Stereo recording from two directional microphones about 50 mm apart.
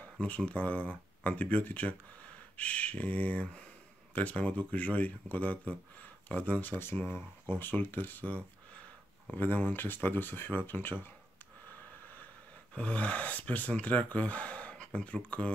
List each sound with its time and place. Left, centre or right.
0.5 s speech: left
12.7 s speech: left